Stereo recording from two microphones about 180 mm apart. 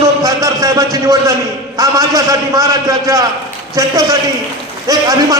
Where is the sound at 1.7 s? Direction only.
20° right (ahead or behind).